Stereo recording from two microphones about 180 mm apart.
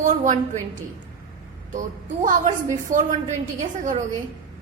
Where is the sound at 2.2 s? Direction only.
45° right (ahead or behind).